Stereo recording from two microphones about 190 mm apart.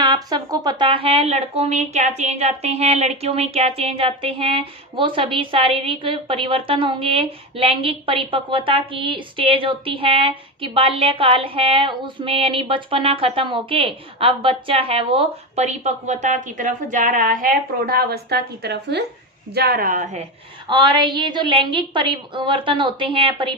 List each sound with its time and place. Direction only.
0.0 s a woman's voice: 20° right (ahead or behind); by 20.2 s 45° right (ahead or behind)
20.7 s speech: 25° right (ahead or behind)